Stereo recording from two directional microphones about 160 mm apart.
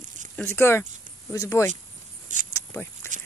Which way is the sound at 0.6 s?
15° left (ahead or behind).